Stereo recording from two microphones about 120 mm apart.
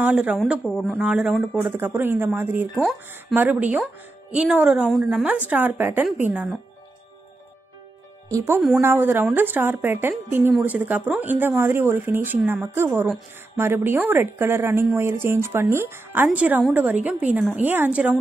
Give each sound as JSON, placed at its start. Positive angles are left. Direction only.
{"t": 0.0, "sound": "speech", "side_deg": -10}
{"t": 8.3, "sound": "speech", "side_deg": -25}